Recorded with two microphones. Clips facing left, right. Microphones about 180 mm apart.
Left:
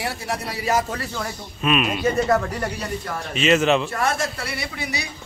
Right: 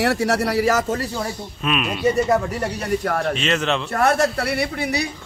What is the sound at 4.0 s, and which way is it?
A man's voice, 65° right (ahead or behind).